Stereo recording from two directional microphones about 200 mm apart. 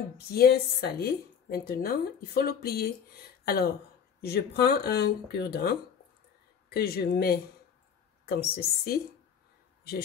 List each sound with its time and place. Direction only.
0.3 s speech: 50° left (ahead or behind)